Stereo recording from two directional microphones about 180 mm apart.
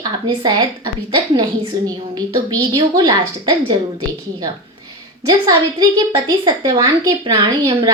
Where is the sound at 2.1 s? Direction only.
25° right (ahead or behind).